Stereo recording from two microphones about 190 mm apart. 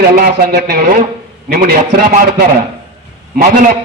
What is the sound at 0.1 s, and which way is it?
A man's voice, 45° right (ahead or behind).